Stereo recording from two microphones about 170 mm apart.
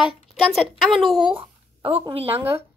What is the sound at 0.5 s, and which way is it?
Speech, centre (ahead or behind).